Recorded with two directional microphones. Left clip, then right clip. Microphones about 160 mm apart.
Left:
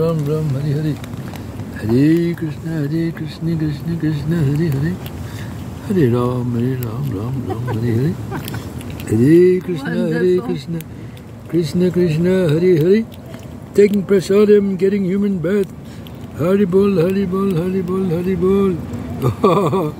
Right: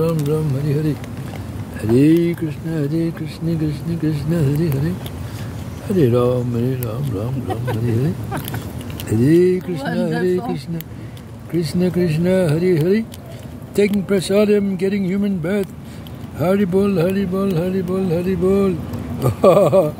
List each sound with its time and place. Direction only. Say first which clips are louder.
0.0 s speech: left 1 dB; 10° right (ahead or behind)
5.9 s speech: right 1 dB; 15° right (ahead or behind)